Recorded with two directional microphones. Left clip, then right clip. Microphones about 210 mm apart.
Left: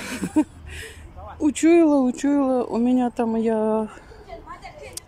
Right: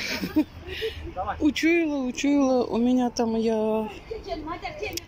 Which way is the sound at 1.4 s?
20° left (ahead or behind).